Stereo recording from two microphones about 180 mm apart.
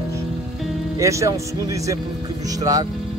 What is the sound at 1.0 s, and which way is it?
Speech, 15° right (ahead or behind).